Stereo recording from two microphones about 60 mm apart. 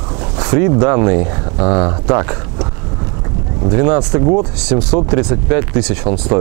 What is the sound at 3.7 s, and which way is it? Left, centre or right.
Speech, centre.